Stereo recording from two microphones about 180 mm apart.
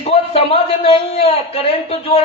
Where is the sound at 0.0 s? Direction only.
35° left (ahead or behind).